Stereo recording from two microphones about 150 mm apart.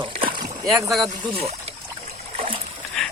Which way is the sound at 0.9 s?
Centre (ahead or behind).